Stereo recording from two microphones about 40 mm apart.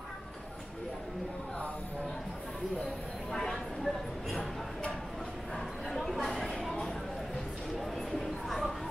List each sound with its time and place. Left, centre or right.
3.3 s vehicle: centre
5.9 s chatter: centre
7.8 s a sound: centre